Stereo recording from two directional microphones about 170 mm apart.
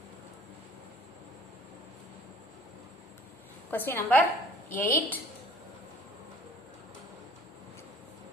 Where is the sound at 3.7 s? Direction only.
10° left (ahead or behind).